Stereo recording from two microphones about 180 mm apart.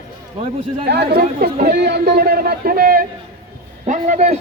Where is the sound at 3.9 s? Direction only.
45° right (ahead or behind).